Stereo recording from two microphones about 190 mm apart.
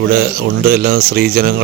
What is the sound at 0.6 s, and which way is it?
Speech, 50° right (ahead or behind).